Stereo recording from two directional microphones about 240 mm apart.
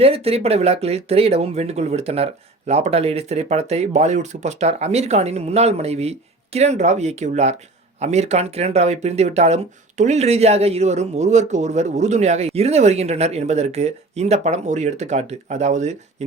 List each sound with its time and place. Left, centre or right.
0.0 s speech: right